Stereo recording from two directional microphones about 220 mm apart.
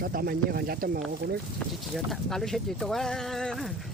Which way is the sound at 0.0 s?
40° right (ahead or behind).